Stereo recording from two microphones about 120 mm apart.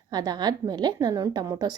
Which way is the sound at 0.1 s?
35° right (ahead or behind).